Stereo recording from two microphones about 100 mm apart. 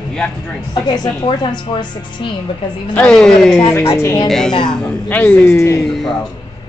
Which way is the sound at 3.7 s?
25° left (ahead or behind).